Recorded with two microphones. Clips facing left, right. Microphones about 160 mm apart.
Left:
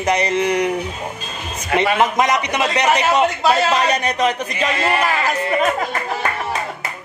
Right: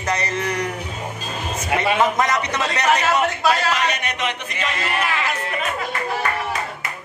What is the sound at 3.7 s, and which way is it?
Speech, 35° left (ahead or behind).